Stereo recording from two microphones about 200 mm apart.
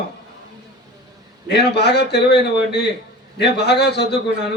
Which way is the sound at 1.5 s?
55° left (ahead or behind).